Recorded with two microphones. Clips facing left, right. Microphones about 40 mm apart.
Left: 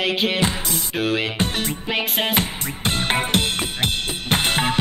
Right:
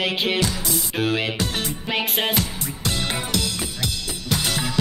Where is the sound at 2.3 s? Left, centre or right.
Left.